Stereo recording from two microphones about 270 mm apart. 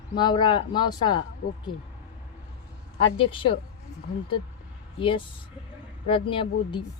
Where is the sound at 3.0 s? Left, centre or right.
Centre.